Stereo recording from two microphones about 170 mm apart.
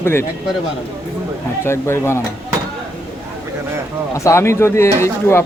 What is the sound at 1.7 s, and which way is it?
Speech, 15° left (ahead or behind).